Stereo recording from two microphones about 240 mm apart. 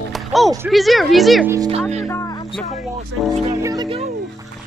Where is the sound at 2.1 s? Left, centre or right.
Centre.